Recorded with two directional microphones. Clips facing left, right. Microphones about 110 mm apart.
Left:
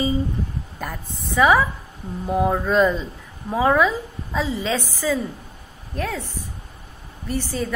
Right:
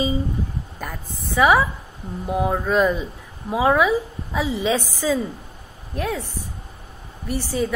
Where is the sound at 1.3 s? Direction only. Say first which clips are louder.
Even; 10° right (ahead or behind).